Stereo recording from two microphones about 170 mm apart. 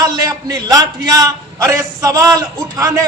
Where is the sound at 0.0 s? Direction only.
25° right (ahead or behind).